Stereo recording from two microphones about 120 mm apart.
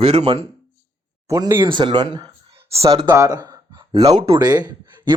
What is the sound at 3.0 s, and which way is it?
Speech, 30° right (ahead or behind).